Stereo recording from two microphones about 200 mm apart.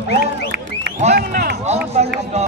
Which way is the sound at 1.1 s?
55° right (ahead or behind).